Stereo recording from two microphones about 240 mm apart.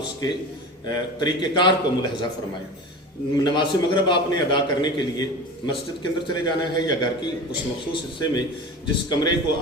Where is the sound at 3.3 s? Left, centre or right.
Centre.